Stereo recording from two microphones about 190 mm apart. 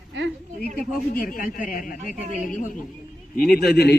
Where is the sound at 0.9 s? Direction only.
45° left (ahead or behind).